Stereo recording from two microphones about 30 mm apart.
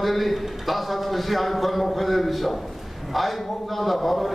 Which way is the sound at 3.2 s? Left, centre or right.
Centre.